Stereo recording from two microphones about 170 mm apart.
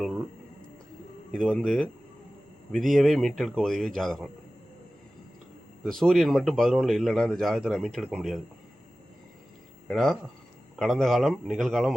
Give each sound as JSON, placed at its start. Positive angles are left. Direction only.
{"t": 1.3, "sound": "speech", "side_deg": 5}
{"t": 5.8, "sound": "speech", "side_deg": 0}
{"t": 9.9, "sound": "speech", "side_deg": 0}